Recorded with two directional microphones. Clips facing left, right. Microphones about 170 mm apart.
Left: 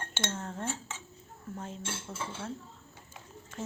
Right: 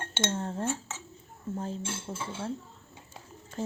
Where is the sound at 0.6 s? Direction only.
5° right (ahead or behind).